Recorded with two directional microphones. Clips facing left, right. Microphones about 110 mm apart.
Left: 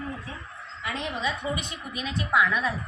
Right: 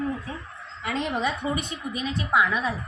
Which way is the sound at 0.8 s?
60° right (ahead or behind).